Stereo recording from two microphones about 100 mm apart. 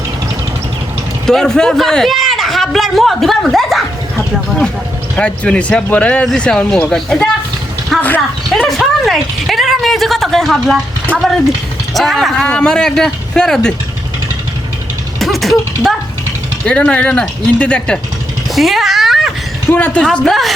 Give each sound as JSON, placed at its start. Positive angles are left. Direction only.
{"t": 1.3, "sound": "a man's voice", "side_deg": 5}
{"t": 5.1, "sound": "speech", "side_deg": 10}
{"t": 7.9, "sound": "dog", "side_deg": 0}
{"t": 8.5, "sound": "speech", "side_deg": 0}
{"t": 11.1, "sound": "speech", "side_deg": 15}
{"t": 11.9, "sound": "speech", "side_deg": 0}
{"t": 15.2, "sound": "a sound", "side_deg": 0}
{"t": 16.6, "sound": "speech", "side_deg": 10}
{"t": 18.5, "sound": "a sound", "side_deg": 0}
{"t": 19.7, "sound": "speech", "side_deg": 15}
{"t": 20.1, "sound": "speech", "side_deg": 5}